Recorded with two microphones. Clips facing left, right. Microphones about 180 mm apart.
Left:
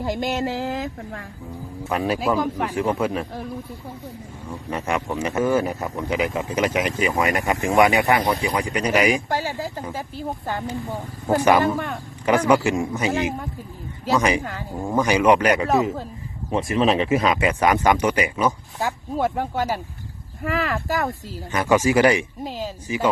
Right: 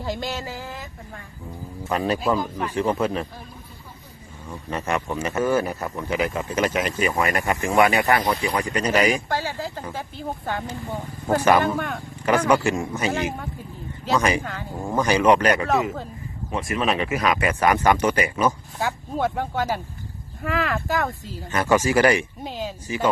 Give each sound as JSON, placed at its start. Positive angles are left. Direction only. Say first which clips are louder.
{"t": 0.0, "sound": "speech", "louder": "left 4 dB", "side_deg": 20}
{"t": 1.8, "sound": "speech", "louder": "even", "side_deg": 0}
{"t": 4.7, "sound": "speech", "louder": "left 1 dB", "side_deg": 15}
{"t": 10.2, "sound": "speech", "louder": "left 1 dB", "side_deg": 0}
{"t": 11.3, "sound": "speech", "louder": "left 1 dB", "side_deg": 20}
{"t": 11.5, "sound": "speech", "louder": "left 1 dB", "side_deg": 0}
{"t": 12.2, "sound": "speech", "louder": "left 1 dB", "side_deg": 15}
{"t": 14.4, "sound": "speech", "louder": "left 2 dB", "side_deg": 0}
{"t": 15.0, "sound": "speech", "louder": "even", "side_deg": 15}
{"t": 15.7, "sound": "speech", "louder": "left 2 dB", "side_deg": 0}
{"t": 16.7, "sound": "speech", "louder": "left 5 dB", "side_deg": 25}
{"t": 18.8, "sound": "speech", "louder": "left 1 dB", "side_deg": 0}
{"t": 21.5, "sound": "speech", "louder": "left 1 dB", "side_deg": 15}
{"t": 22.4, "sound": "speech", "louder": "left 1 dB", "side_deg": 0}